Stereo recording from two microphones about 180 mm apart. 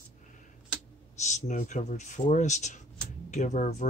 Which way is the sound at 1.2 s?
40° left (ahead or behind).